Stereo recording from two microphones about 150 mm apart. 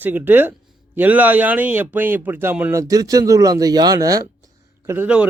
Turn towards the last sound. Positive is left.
turn(degrees=-10)  # may be behind; listen again after turning